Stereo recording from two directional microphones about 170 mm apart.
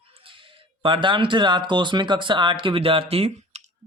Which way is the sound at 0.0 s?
30° right (ahead or behind).